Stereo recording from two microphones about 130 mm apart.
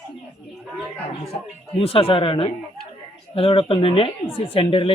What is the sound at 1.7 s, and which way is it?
Speech, 45° left (ahead or behind).